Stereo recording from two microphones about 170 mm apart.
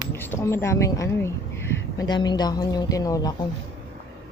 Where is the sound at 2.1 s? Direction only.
25° left (ahead or behind).